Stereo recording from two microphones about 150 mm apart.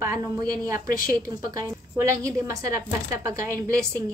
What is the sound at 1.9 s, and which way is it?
Speech, 20° right (ahead or behind).